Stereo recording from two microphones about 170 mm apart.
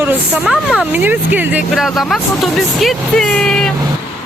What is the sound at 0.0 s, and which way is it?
Speech, 10° right (ahead or behind).